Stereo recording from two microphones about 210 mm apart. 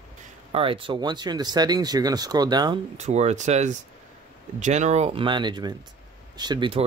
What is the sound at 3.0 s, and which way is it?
Speech, 30° right (ahead or behind).